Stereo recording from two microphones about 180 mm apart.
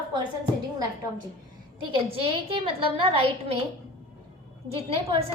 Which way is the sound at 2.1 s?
30° right (ahead or behind).